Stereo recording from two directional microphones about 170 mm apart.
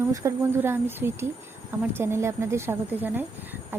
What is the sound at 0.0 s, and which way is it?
A woman's voice, 20° right (ahead or behind).